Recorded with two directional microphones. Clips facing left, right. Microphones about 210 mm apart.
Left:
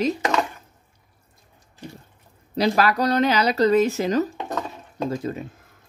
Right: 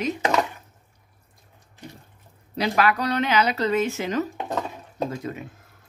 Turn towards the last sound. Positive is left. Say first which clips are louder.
# left 3 dB
turn(degrees=35)  # may be behind; listen again after turning